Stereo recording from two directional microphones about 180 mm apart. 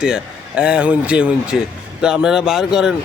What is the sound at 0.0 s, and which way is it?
A man's voice, 5° right (ahead or behind).